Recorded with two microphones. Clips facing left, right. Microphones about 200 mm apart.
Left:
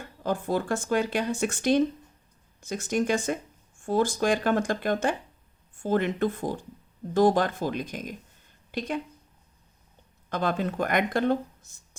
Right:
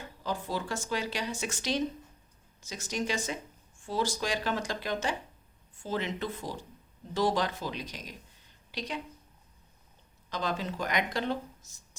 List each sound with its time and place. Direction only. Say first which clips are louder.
0.0 s speech: left 6 dB; 50° left (ahead or behind)
10.2 s speech: left 6 dB; 55° left (ahead or behind)